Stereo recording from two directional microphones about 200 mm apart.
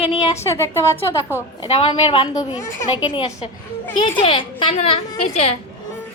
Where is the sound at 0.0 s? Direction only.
30° left (ahead or behind).